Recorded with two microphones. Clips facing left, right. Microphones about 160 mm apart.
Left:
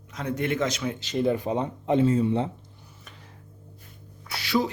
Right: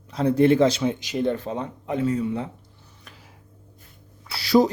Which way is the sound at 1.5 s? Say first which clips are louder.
Left 4 dB; 20° left (ahead or behind).